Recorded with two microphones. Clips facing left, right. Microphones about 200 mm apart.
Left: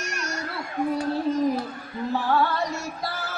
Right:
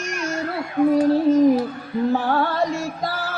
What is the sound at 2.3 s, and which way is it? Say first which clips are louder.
Music: right 3 dB; 50° right (ahead or behind).